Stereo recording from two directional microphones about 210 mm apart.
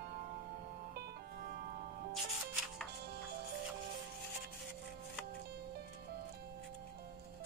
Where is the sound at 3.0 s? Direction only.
50° right (ahead or behind).